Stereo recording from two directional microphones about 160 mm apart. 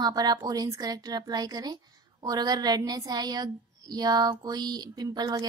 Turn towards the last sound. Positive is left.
turn(degrees=-25)  # may be behind; listen again after turning